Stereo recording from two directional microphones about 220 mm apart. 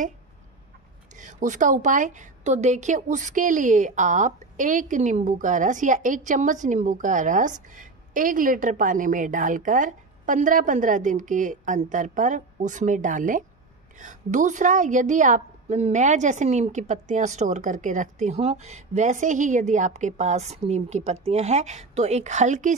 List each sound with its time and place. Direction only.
1.1 s a woman's voice: 35° right (ahead or behind)